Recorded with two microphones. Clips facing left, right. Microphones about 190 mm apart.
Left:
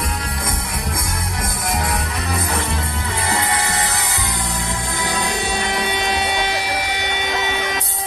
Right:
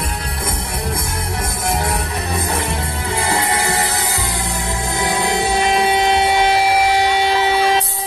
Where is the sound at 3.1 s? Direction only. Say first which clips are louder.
Right 3 dB; 25° right (ahead or behind).